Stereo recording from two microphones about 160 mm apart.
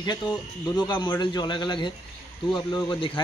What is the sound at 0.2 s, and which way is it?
Speech, 25° left (ahead or behind).